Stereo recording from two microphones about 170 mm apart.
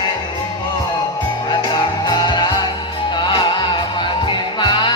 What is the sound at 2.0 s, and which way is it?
Music, 25° left (ahead or behind).